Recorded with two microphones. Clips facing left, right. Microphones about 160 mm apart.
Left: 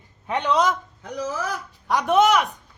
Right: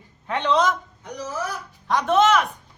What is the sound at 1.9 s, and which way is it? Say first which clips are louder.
Speech: even; 10° left (ahead or behind).